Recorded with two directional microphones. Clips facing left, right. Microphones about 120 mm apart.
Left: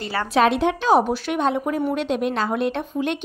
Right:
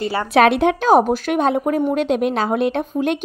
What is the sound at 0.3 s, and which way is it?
A woman's voice, 65° right (ahead or behind).